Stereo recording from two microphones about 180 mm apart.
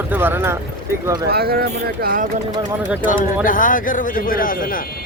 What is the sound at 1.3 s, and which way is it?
Speech, 60° right (ahead or behind).